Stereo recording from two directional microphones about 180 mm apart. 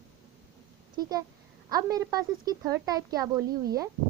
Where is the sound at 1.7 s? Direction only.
20° right (ahead or behind).